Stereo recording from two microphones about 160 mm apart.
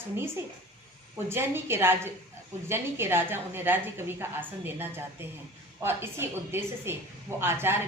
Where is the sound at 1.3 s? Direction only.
15° right (ahead or behind).